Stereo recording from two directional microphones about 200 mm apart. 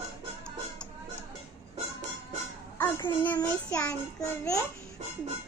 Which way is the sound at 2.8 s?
20° left (ahead or behind).